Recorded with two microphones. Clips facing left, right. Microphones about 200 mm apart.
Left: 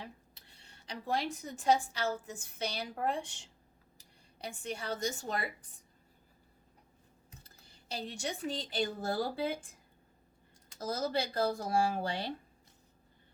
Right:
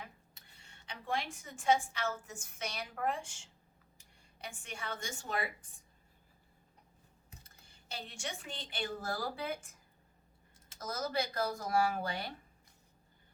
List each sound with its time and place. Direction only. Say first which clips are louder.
0.0 s a woman's voice: left 3 dB; 35° left (ahead or behind)
7.4 s speech: left 5 dB; 35° left (ahead or behind)
10.8 s speech: left 3 dB; 30° left (ahead or behind)